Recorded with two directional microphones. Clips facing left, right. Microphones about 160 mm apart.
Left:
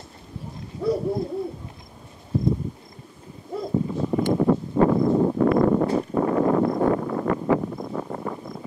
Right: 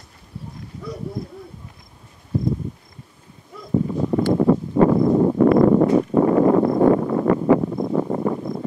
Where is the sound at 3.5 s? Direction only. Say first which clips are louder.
Left 10 dB; 30° left (ahead or behind).